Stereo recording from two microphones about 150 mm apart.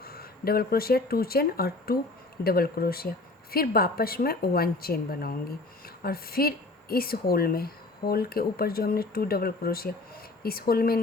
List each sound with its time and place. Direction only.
0.0 s a woman's voice: 90° left